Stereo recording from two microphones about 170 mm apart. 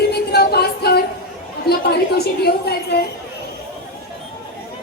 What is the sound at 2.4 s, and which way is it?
Speech, 70° left (ahead or behind).